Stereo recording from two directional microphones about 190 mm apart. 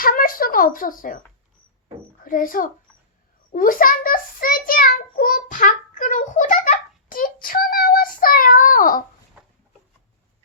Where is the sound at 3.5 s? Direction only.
45° left (ahead or behind).